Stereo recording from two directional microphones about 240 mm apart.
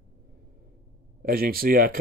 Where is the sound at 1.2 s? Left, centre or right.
Right.